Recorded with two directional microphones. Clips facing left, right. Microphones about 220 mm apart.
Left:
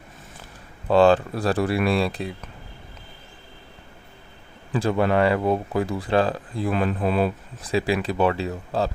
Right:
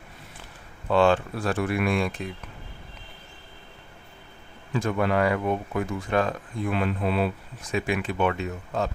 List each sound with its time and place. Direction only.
0.9 s speech: 35° left (ahead or behind)
4.7 s speech: 30° left (ahead or behind)